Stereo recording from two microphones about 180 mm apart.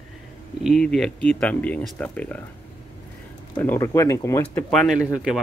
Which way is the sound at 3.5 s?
10° left (ahead or behind).